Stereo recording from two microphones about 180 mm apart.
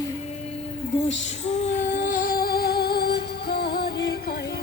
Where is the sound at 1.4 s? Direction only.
45° left (ahead or behind); by 4.1 s 65° left (ahead or behind).